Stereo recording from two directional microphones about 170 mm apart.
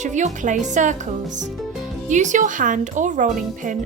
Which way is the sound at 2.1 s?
45° right (ahead or behind).